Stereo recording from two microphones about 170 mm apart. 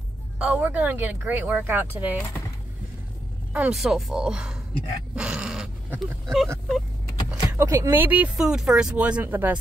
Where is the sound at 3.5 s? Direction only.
5° right (ahead or behind).